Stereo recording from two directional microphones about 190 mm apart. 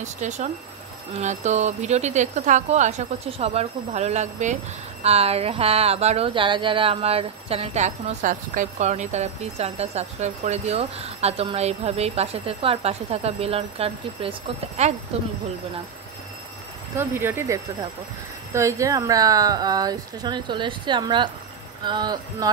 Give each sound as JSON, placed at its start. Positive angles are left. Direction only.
{"t": 0.0, "sound": "speech", "side_deg": -40}
{"t": 16.9, "sound": "speech", "side_deg": -10}